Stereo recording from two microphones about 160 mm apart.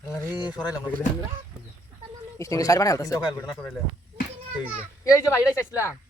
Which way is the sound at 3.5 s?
Centre (ahead or behind).